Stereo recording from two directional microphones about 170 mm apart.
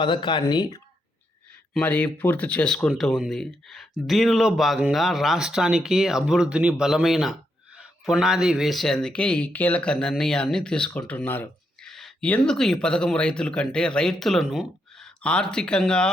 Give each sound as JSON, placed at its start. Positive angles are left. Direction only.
{"t": 0.0, "sound": "speech", "side_deg": 30}
{"t": 1.7, "sound": "speech", "side_deg": 10}